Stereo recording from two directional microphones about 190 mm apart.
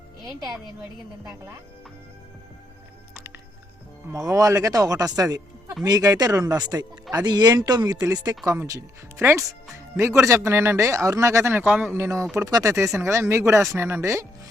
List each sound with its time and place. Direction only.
0.3 s a woman's voice: centre (ahead or behind)
1.2 s speech: 15° right (ahead or behind)
4.1 s speech: 15° right (ahead or behind)